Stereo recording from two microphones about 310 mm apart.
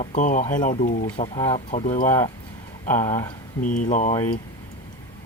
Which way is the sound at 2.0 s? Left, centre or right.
Centre.